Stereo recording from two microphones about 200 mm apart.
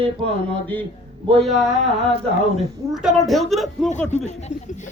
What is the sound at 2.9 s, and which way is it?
Speech, centre (ahead or behind).